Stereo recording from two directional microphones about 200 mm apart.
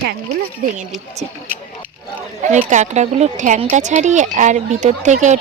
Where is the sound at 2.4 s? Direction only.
35° right (ahead or behind).